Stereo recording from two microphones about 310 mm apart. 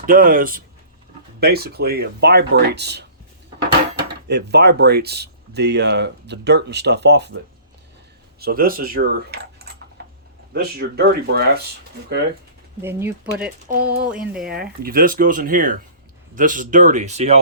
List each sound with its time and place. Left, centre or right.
0.0 s speech: right
4.3 s speech: right
10.0 s a sound: right
10.5 s speech: right
12.8 s speech: centre
13.7 s speech: right
14.0 s speech: centre
14.5 s speech: right